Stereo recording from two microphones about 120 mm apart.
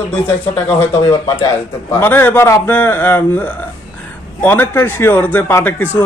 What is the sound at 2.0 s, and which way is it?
A man's voice, 15° left (ahead or behind).